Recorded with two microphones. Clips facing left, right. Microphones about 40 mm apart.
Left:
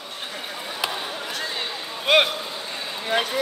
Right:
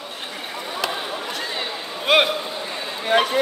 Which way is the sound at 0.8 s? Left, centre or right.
Centre.